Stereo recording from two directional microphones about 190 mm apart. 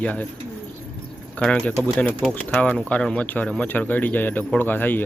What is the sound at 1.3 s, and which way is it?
Speech, 5° left (ahead or behind).